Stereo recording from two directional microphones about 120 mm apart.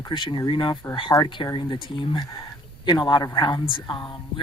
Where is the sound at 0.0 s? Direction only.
40° left (ahead or behind).